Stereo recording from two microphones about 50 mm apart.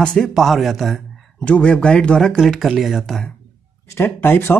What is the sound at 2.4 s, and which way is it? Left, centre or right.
Speech, centre.